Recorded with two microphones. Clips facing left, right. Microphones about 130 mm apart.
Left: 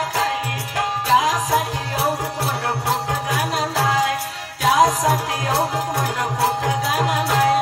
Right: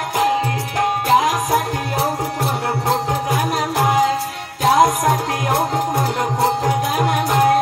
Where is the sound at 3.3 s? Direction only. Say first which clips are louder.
Right 1 dB; 15° right (ahead or behind).